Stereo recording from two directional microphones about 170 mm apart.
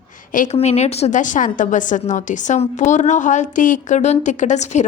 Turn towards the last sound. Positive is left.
turn(degrees=45)  # may be behind; listen again after turning